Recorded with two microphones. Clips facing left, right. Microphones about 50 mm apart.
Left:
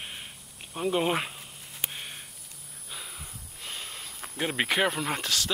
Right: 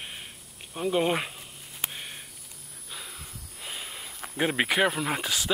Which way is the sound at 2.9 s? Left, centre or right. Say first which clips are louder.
Even; centre.